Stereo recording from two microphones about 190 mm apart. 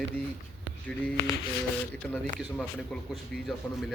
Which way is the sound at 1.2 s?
55° left (ahead or behind).